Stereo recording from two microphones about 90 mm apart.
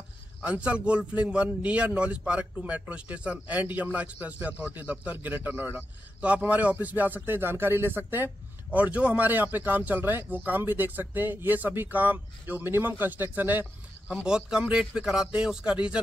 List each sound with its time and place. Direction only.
0.4 s a man's voice: 15° right (ahead or behind)
14.2 s a man's voice: 10° right (ahead or behind)